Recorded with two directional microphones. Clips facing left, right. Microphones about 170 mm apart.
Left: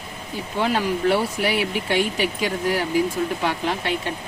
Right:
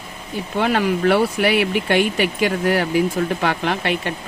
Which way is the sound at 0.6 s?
65° right (ahead or behind).